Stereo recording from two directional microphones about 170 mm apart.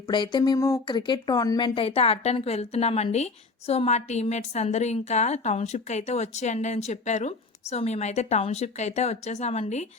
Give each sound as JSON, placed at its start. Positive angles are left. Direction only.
{"t": 0.1, "sound": "a woman's voice", "side_deg": 25}